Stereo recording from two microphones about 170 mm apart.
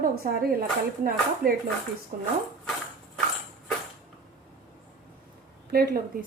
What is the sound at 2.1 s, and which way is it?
Speech, 55° right (ahead or behind).